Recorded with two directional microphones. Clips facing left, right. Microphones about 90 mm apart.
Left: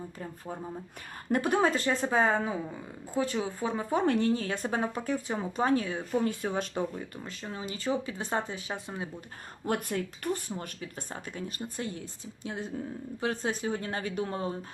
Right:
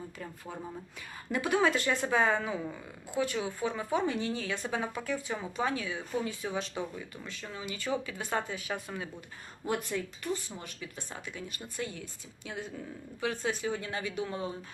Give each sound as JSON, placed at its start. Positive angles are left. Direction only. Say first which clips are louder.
{"t": 1.3, "sound": "speech", "louder": "left 2 dB", "side_deg": 40}
{"t": 4.0, "sound": "speech", "louder": "left 6 dB", "side_deg": 60}
{"t": 4.3, "sound": "speech", "louder": "left 4 dB", "side_deg": 40}
{"t": 7.3, "sound": "speech", "louder": "left 1 dB", "side_deg": 35}
{"t": 9.6, "sound": "speech", "louder": "left 2 dB", "side_deg": 50}